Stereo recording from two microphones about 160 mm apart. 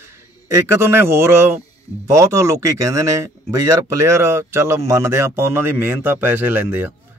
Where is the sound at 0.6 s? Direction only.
15° right (ahead or behind).